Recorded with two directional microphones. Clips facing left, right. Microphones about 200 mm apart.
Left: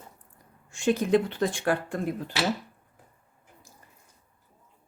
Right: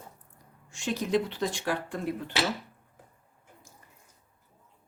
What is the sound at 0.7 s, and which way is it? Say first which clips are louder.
Speech: left 6 dB; 55° left (ahead or behind).